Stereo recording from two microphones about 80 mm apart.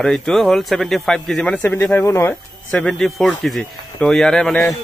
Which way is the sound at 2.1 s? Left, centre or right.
Left.